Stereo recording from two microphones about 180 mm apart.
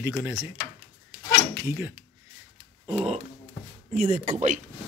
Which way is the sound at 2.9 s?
35° right (ahead or behind).